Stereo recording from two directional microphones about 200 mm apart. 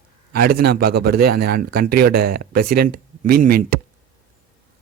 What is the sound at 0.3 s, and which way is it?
A man's voice, 50° right (ahead or behind).